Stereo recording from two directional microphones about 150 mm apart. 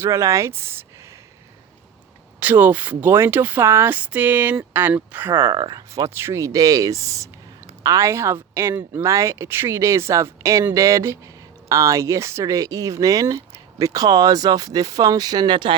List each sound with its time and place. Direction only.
0.0 s speech: 20° right (ahead or behind)
2.4 s speech: 10° right (ahead or behind); by 15.7 s 30° right (ahead or behind)